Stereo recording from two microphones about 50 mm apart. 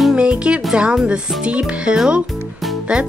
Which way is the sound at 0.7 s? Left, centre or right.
Right.